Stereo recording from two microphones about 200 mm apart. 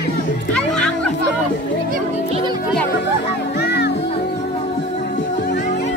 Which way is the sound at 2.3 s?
20° right (ahead or behind).